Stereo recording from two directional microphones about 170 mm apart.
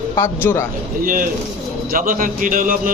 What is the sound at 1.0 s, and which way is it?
A man's voice, 55° right (ahead or behind).